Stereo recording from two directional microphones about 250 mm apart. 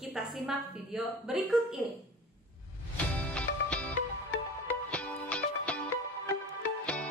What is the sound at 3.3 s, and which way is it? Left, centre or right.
Music, centre.